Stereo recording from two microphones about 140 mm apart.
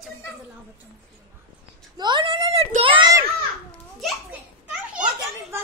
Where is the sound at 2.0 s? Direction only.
35° right (ahead or behind).